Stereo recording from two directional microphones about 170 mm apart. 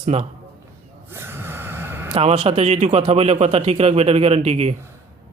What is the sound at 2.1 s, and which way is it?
A man's voice, 35° right (ahead or behind).